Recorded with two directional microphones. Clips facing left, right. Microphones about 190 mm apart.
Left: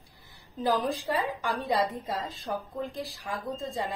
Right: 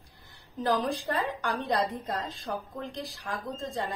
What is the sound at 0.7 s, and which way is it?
A woman's voice, centre (ahead or behind).